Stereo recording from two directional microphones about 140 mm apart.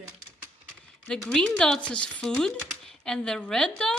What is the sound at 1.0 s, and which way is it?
Speech, 5° left (ahead or behind).